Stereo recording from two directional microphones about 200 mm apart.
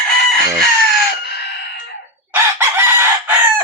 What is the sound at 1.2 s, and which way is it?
Chicken, 55° left (ahead or behind).